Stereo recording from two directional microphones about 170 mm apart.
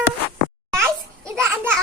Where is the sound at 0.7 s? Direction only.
15° right (ahead or behind).